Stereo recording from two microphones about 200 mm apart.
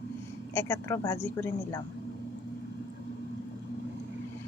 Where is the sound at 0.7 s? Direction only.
20° left (ahead or behind).